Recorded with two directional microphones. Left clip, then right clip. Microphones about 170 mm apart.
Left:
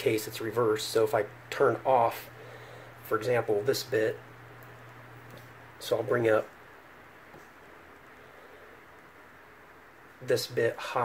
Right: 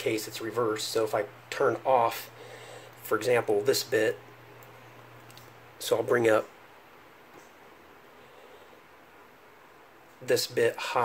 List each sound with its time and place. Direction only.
0.0 s speech: 15° left (ahead or behind)
3.1 s speech: 30° right (ahead or behind)
5.8 s speech: 30° right (ahead or behind)
10.2 s speech: 20° right (ahead or behind)